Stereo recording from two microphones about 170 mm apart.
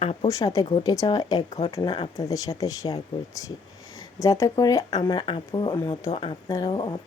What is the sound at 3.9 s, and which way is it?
Speech, 20° left (ahead or behind).